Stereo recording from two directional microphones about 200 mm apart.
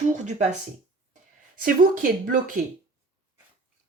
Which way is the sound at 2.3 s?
40° right (ahead or behind).